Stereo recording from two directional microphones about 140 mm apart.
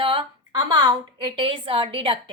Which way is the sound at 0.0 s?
40° right (ahead or behind).